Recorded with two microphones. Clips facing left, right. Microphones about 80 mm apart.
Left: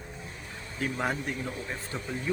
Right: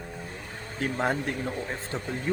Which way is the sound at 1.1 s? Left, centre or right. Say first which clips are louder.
Right 4 dB; right.